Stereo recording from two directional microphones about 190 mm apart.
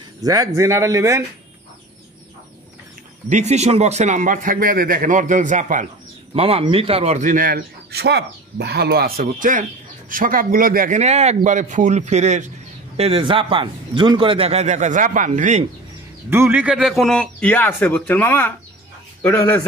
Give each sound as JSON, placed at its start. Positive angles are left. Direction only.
{"t": 0.2, "sound": "speech", "side_deg": -20}
{"t": 3.3, "sound": "a man's voice", "side_deg": -35}
{"t": 6.3, "sound": "a man's voice", "side_deg": -30}
{"t": 16.3, "sound": "a man's voice", "side_deg": -10}